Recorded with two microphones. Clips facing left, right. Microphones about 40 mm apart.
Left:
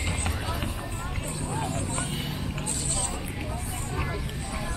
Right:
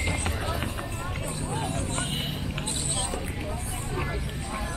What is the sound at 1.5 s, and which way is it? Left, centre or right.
Vehicle, right.